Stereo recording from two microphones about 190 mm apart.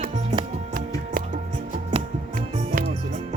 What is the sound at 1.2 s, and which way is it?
Music, 50° right (ahead or behind).